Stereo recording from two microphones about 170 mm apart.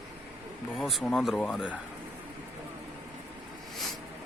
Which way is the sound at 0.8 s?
Centre (ahead or behind).